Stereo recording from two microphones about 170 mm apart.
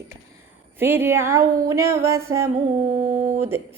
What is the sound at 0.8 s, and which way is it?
Speech, 15° right (ahead or behind).